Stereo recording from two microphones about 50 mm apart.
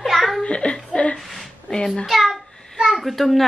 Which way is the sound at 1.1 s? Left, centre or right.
Centre.